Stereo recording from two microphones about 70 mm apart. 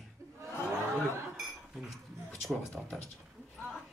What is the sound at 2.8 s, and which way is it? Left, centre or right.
Speech, right.